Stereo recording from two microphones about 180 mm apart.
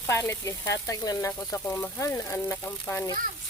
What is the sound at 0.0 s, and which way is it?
Speech, 15° left (ahead or behind).